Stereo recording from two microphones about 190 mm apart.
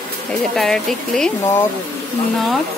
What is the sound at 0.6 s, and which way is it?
Speech, centre (ahead or behind).